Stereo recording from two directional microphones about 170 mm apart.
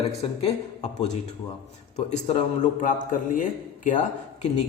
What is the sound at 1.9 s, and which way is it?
Speech, 45° left (ahead or behind).